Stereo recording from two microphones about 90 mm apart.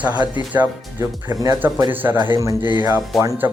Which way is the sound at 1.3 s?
45° right (ahead or behind).